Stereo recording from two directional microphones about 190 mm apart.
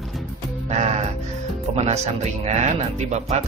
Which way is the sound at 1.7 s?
35° right (ahead or behind).